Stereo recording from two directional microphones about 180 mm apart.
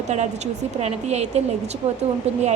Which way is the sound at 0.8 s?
40° right (ahead or behind).